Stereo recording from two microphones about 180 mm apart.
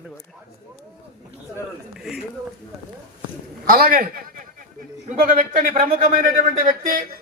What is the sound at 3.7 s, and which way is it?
A man's voice, 50° right (ahead or behind).